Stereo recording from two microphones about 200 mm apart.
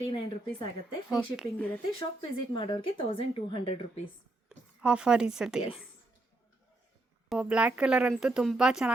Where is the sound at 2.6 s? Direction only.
25° left (ahead or behind).